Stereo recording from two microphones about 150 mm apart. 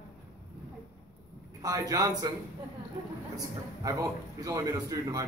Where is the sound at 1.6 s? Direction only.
25° right (ahead or behind).